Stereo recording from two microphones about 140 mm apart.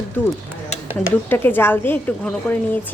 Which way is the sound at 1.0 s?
15° left (ahead or behind).